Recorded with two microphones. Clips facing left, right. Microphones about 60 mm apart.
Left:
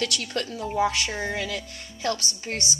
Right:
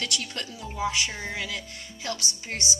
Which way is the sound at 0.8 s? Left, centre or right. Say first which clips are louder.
Left 3 dB; left.